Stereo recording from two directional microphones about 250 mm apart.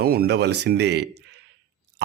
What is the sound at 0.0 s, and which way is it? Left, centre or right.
Speech, right.